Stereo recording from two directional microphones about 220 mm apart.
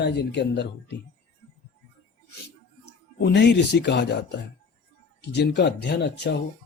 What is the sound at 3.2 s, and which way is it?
Speech, 50° left (ahead or behind).